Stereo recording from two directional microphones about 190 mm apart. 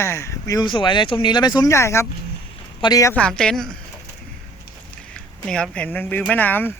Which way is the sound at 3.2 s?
5° left (ahead or behind).